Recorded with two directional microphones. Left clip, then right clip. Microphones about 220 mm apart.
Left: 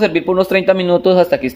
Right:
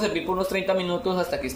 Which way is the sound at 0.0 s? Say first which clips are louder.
Left 11 dB; 40° left (ahead or behind).